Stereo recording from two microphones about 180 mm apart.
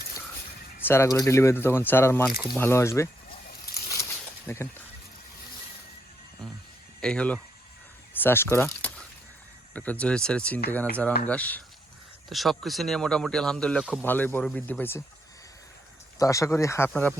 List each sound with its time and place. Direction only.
0.9 s speech: 15° left (ahead or behind)
4.4 s speech: 15° left (ahead or behind)
7.0 s speech: 5° left (ahead or behind)
16.1 s speech: 20° left (ahead or behind)